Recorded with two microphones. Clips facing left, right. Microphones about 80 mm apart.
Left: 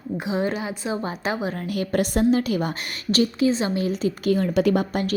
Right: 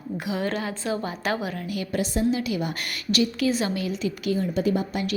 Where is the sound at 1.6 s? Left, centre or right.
Left.